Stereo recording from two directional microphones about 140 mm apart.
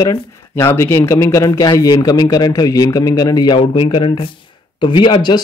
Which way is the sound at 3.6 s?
40° left (ahead or behind).